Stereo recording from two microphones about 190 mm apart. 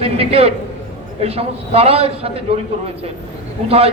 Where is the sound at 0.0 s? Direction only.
30° right (ahead or behind).